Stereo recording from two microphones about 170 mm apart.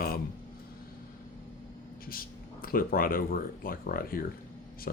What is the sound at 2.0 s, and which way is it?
Speech, 60° left (ahead or behind).